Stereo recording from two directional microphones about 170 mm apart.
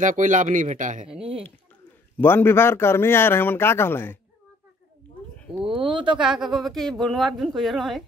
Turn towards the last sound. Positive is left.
turn(degrees=0)  # may be behind; listen again after turning